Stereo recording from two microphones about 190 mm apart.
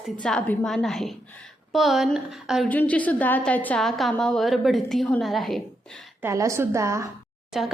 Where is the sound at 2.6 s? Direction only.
10° left (ahead or behind).